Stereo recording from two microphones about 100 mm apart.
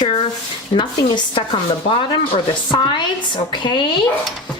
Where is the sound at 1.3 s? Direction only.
60° left (ahead or behind).